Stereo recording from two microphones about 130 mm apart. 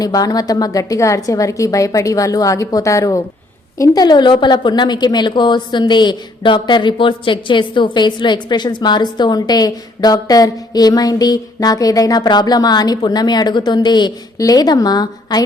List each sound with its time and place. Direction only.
0.0 s a woman's voice: 30° left (ahead or behind)